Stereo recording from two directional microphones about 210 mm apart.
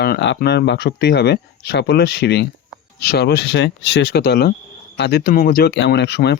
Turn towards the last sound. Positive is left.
turn(degrees=55)  # may be behind; listen again after turning